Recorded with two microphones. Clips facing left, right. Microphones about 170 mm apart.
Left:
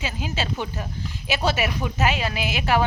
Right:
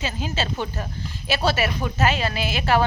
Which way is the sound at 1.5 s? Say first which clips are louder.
Right 1 dB; 15° left (ahead or behind).